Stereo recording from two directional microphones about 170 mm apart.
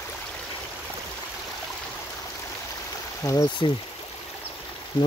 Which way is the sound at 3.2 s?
20° left (ahead or behind).